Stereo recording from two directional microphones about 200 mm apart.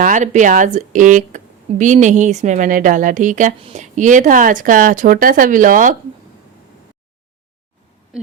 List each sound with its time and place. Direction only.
0.0 s a woman's voice: 40° right (ahead or behind)